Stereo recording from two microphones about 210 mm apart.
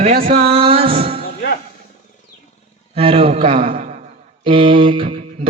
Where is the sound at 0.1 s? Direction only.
45° right (ahead or behind).